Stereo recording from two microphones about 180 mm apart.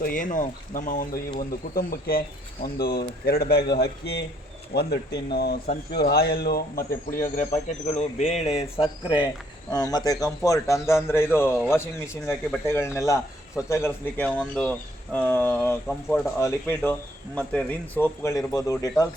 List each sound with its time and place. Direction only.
0.0 s speech: 50° left (ahead or behind)
7.3 s speech: 40° left (ahead or behind); by 19.0 s 20° left (ahead or behind)